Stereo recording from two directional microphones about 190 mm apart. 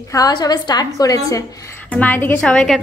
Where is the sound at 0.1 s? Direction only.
20° left (ahead or behind).